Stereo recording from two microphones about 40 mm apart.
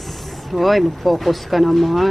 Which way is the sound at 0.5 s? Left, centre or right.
Centre.